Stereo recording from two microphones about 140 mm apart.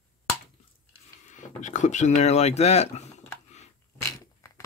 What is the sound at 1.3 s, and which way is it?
Speech, 65° left (ahead or behind).